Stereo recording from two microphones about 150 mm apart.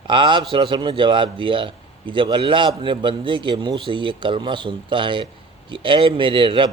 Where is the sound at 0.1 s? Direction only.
35° right (ahead or behind).